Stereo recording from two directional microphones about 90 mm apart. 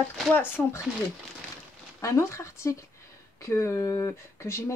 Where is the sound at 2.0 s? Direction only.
35° left (ahead or behind).